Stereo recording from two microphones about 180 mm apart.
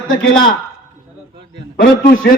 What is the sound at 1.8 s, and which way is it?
Speech, 50° left (ahead or behind).